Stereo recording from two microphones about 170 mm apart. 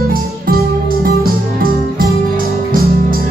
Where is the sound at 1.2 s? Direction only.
60° right (ahead or behind).